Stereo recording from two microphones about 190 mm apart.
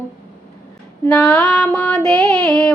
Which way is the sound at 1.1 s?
5° left (ahead or behind).